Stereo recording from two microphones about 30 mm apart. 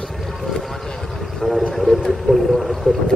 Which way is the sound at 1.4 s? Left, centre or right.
Centre.